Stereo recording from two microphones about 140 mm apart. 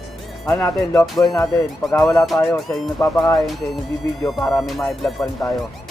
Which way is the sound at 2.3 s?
15° left (ahead or behind).